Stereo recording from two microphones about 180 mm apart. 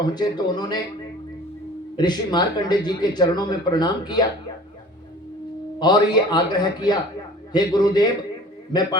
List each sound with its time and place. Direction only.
0.1 s speech: 25° left (ahead or behind)
2.0 s speech: 25° left (ahead or behind)
5.8 s speech: 25° left (ahead or behind)